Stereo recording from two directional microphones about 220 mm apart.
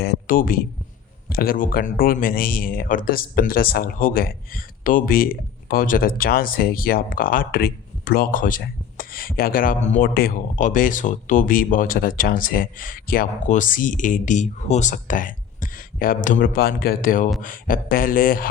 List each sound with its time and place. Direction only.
0.0 s speech: 45° left (ahead or behind)